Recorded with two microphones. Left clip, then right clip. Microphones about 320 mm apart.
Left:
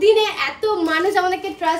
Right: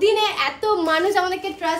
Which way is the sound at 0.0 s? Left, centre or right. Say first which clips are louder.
Left 3 dB; centre.